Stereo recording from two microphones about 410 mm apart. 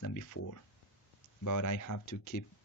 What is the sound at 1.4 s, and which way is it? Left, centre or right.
Speech, left.